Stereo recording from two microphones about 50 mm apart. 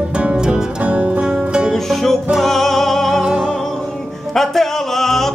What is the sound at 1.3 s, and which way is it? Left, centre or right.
Music, centre.